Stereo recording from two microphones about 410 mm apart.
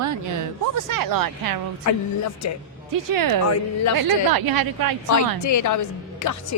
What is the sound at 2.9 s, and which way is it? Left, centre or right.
A woman's voice, right.